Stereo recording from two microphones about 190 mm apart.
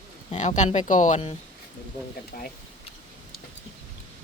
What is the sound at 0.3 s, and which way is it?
Speech, 40° left (ahead or behind).